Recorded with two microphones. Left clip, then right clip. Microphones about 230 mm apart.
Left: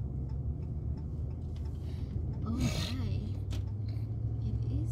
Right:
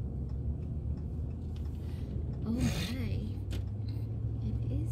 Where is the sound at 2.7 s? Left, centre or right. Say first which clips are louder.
Even; left.